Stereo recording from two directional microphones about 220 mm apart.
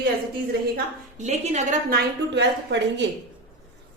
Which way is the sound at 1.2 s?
30° right (ahead or behind).